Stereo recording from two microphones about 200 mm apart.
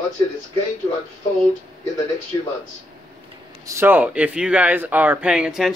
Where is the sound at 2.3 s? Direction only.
20° left (ahead or behind).